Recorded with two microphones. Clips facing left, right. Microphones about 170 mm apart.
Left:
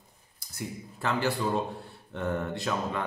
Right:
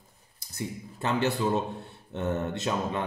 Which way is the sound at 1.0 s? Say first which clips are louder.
Right 2 dB; 20° right (ahead or behind).